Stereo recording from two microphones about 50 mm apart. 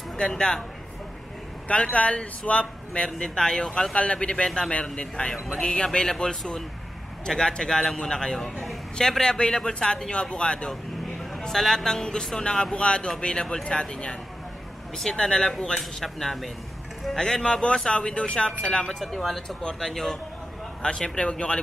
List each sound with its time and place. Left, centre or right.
0.2 s a man's voice: centre
1.7 s a man's voice: left; by 16.4 s centre
17.2 s a man's voice: centre
18.9 s a man's voice: centre